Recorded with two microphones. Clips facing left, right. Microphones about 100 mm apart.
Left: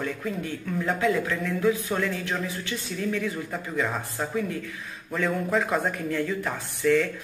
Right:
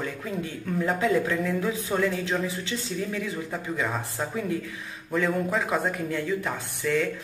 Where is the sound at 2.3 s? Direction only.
25° right (ahead or behind).